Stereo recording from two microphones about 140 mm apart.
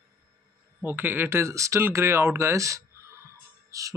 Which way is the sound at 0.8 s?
15° right (ahead or behind).